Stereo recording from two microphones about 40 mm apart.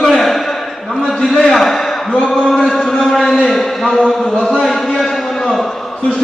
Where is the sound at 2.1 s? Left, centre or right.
Left.